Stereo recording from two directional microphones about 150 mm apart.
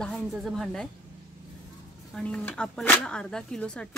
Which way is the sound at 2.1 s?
10° left (ahead or behind).